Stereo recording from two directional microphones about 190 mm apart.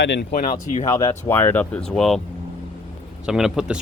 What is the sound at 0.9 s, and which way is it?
Speech, 15° left (ahead or behind).